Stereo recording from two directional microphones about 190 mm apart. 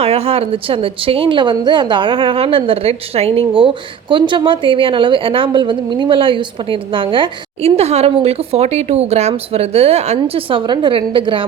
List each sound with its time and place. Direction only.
0.0 s a woman's voice: 30° right (ahead or behind)